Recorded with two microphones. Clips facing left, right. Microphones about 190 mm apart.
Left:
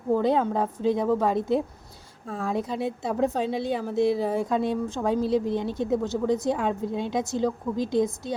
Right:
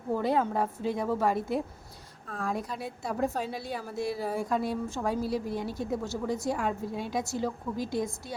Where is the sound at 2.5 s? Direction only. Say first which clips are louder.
Left 8 dB; 25° left (ahead or behind).